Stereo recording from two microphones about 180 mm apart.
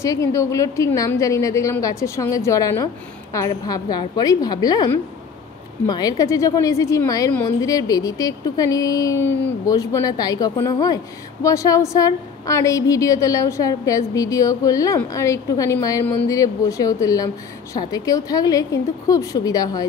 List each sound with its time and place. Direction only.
0.0 s a woman's voice: 15° left (ahead or behind)